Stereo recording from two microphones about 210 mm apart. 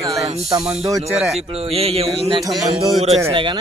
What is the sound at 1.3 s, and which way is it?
A man's voice, 30° right (ahead or behind).